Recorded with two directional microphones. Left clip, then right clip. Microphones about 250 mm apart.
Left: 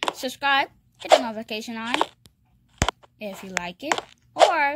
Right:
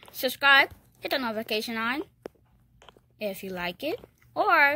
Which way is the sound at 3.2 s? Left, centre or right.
Centre.